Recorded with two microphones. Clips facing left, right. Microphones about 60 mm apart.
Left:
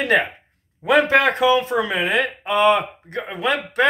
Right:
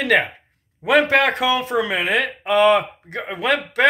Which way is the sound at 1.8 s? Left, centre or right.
Right.